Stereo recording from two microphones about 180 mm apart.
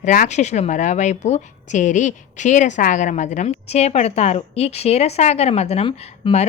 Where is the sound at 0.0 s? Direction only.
45° left (ahead or behind).